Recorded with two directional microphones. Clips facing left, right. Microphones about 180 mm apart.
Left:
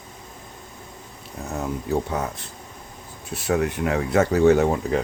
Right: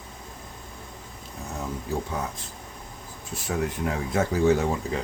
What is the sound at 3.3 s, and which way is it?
Speech, 70° left (ahead or behind).